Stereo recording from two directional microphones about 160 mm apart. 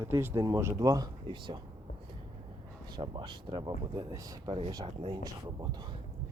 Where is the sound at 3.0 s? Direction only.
30° right (ahead or behind).